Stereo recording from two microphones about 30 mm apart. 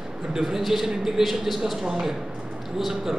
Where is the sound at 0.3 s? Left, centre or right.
Centre.